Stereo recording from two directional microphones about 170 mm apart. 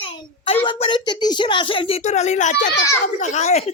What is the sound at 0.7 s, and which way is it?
Speech, 30° left (ahead or behind).